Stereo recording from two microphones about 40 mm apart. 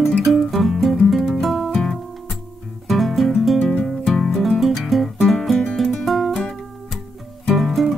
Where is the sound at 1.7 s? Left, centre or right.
Centre.